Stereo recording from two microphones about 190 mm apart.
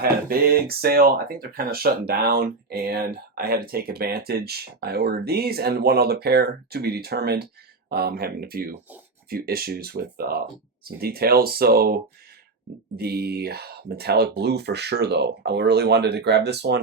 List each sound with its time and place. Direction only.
0.0 s speech: 55° right (ahead or behind)
13.0 s speech: 55° right (ahead or behind)